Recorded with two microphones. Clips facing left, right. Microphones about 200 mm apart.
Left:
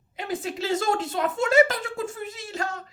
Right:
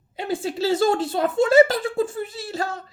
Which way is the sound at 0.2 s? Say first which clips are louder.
Right 5 dB; 30° right (ahead or behind).